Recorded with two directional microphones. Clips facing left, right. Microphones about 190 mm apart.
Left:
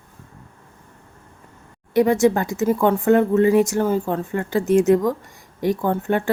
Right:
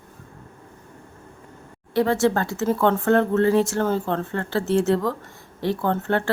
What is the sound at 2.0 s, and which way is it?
Speech, 15° left (ahead or behind).